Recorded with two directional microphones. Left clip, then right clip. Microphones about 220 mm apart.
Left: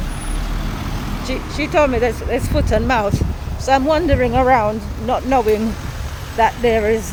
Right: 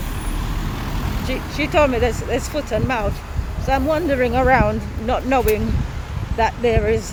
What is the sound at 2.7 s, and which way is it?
Speech, 20° left (ahead or behind).